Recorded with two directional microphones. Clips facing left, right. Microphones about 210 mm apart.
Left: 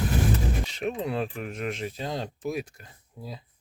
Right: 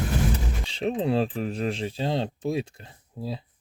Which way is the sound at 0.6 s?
30° right (ahead or behind).